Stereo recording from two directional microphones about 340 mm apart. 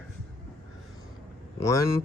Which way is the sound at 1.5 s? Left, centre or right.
Centre.